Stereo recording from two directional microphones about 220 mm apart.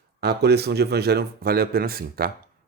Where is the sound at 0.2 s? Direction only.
50° right (ahead or behind).